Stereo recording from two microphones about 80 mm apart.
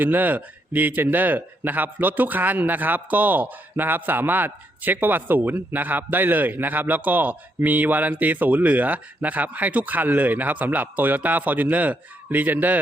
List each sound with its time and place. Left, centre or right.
0.0 s speech: right